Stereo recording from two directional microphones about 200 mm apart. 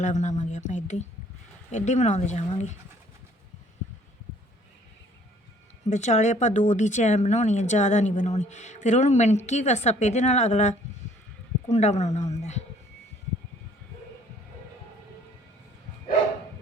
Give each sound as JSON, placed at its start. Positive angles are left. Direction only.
{"t": 0.0, "sound": "speech", "side_deg": 35}
{"t": 5.9, "sound": "speech", "side_deg": 35}